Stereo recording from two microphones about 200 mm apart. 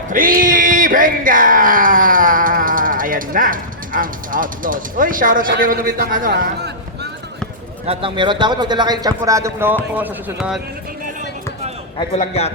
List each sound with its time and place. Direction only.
0.1 s speech: 45° right (ahead or behind)
7.9 s a man's voice: 25° right (ahead or behind); by 10.6 s 5° right (ahead or behind)
12.1 s a man's voice: 30° left (ahead or behind)